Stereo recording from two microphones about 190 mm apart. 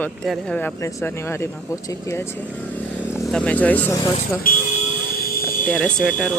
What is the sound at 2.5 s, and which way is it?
Vehicle, 10° left (ahead or behind).